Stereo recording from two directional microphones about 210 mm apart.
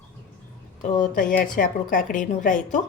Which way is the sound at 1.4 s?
40° left (ahead or behind).